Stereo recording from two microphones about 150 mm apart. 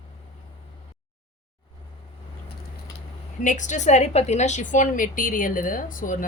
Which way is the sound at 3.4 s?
55° left (ahead or behind).